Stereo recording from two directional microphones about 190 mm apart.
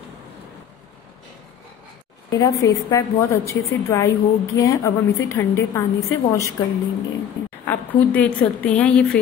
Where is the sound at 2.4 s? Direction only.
15° left (ahead or behind).